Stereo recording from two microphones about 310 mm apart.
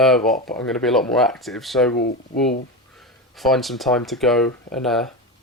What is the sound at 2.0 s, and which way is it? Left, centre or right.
Speech, left.